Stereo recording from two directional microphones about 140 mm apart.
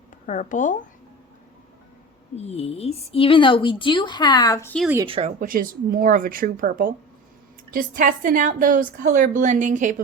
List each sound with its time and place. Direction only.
0.3 s speech: 65° left (ahead or behind)
2.3 s a woman's voice: 50° left (ahead or behind); by 4.7 s 25° left (ahead or behind)
5.0 s speech: 45° right (ahead or behind)
5.4 s a woman's voice: 80° right; by 9.9 s 65° right (ahead or behind)